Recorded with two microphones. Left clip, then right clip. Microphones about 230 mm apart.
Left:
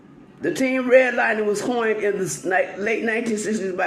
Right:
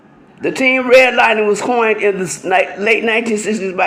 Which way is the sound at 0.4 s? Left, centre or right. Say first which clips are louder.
Right 8 dB; centre.